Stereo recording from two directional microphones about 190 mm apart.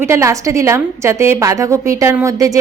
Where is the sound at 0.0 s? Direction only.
15° right (ahead or behind).